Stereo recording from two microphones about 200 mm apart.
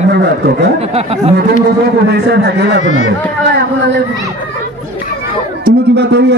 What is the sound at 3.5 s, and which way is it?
Speech, 55° right (ahead or behind).